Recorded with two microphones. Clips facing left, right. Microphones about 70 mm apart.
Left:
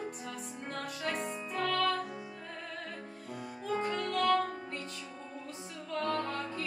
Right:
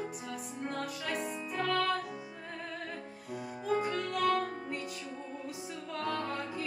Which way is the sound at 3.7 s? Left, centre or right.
Centre.